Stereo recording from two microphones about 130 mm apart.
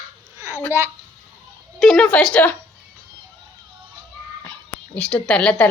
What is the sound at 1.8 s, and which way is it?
Speech, 5° left (ahead or behind).